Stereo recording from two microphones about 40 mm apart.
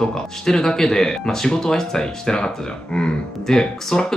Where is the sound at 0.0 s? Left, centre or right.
Centre.